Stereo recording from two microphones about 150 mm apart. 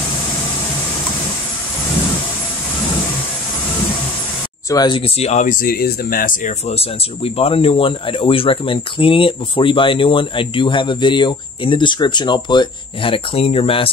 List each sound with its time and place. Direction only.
4.6 s speech: 30° left (ahead or behind); by 6.5 s 70° left (ahead or behind)
6.8 s speech: 40° left (ahead or behind)